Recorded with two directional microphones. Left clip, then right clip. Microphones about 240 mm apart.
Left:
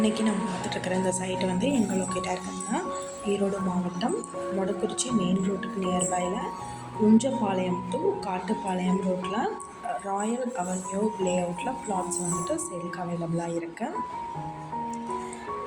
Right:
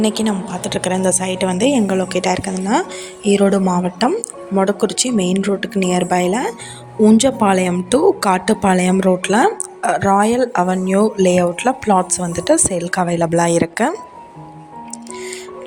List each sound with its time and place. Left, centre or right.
0.0 s a woman's voice: right
4.0 s speech: right